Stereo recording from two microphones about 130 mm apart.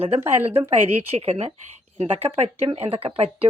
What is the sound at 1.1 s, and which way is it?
Speech, 50° right (ahead or behind).